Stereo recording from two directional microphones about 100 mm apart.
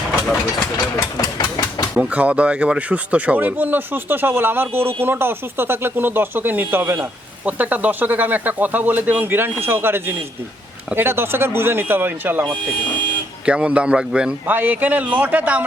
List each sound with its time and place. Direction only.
0.9 s engine: 35° left (ahead or behind)
2.0 s speech: 15° right (ahead or behind)